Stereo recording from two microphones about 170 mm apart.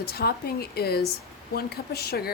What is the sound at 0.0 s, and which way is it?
A woman's voice, 65° left (ahead or behind).